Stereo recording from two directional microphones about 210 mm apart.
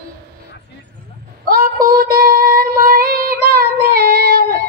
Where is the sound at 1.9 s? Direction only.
45° right (ahead or behind).